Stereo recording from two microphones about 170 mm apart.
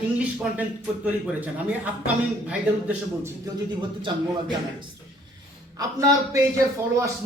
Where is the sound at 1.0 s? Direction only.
10° right (ahead or behind).